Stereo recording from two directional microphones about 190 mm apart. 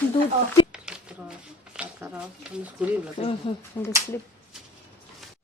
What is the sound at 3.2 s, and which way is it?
Speech, 35° left (ahead or behind).